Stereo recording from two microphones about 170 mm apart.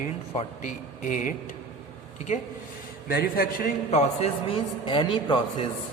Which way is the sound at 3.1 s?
60° left (ahead or behind).